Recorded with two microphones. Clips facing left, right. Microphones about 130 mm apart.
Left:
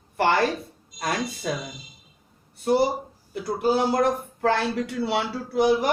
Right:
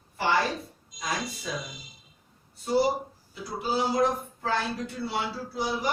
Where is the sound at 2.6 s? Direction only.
65° left (ahead or behind).